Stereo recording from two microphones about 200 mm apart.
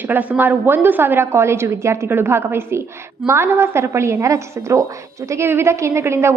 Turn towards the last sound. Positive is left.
turn(degrees=-15)  # may be behind; listen again after turning